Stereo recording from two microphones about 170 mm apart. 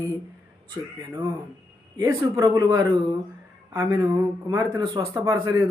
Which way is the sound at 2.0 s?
20° right (ahead or behind).